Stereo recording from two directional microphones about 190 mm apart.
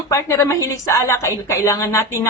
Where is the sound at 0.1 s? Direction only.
15° left (ahead or behind).